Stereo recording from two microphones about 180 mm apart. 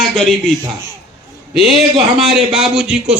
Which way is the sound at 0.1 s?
5° left (ahead or behind).